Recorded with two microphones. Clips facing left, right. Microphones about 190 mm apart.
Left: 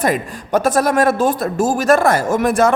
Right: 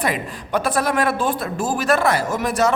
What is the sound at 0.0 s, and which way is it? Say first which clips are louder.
A man's voice: left 5 dB; 45° left (ahead or behind).